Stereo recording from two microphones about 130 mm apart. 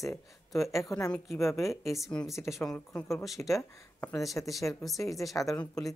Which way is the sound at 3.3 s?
25° left (ahead or behind).